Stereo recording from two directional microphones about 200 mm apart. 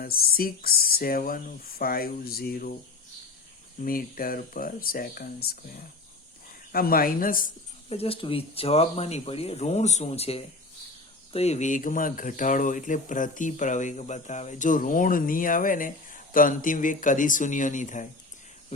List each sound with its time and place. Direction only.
0.0 s speech: 50° left (ahead or behind)
3.8 s speech: 45° left (ahead or behind)
6.7 s speech: 45° left (ahead or behind)
7.9 s speech: 30° left (ahead or behind)